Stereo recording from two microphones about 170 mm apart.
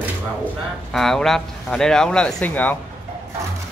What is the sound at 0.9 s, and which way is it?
Speech, centre (ahead or behind).